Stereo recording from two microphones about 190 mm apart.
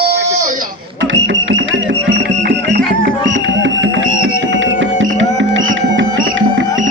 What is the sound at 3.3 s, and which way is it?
Music, 75° right (ahead or behind).